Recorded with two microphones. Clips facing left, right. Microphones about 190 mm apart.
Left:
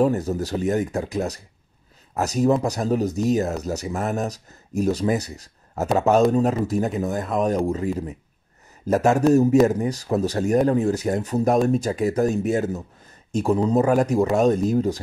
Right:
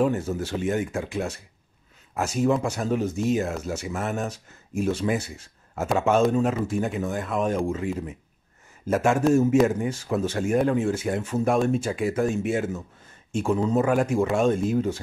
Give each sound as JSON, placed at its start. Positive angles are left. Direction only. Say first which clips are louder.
{"t": 0.0, "sound": "speech", "louder": "left 3 dB", "side_deg": 40}